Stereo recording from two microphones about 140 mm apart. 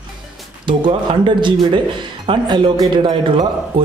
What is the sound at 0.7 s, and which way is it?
A man's voice, 35° right (ahead or behind).